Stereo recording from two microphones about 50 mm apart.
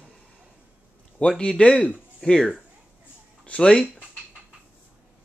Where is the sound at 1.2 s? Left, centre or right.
Centre.